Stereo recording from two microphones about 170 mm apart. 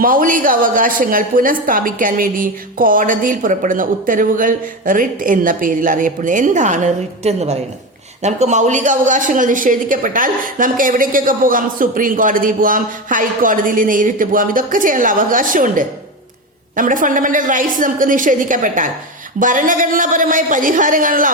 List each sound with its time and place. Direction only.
0.0 s a woman's voice: 55° right (ahead or behind)